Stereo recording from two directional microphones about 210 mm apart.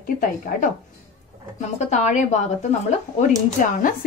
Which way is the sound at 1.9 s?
35° left (ahead or behind).